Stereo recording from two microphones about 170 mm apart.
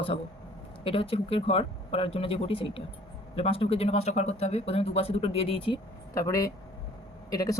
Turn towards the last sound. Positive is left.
turn(degrees=20)  # may be behind; listen again after turning